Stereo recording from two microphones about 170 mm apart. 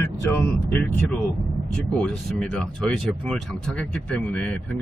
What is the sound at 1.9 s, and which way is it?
Speech, 5° left (ahead or behind).